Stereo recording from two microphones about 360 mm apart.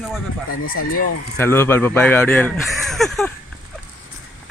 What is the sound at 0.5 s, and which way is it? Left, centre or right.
Speech, left.